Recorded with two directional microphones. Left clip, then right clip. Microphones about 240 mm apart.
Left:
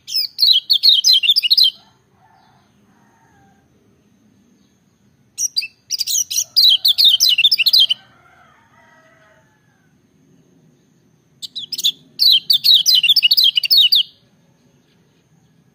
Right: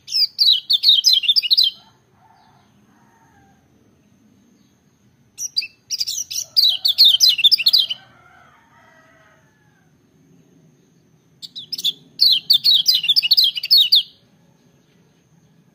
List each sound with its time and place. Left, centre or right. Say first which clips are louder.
0.0 s chirp: even; centre
5.3 s chirp: left 3 dB; centre
12.2 s chirp: left 2 dB; centre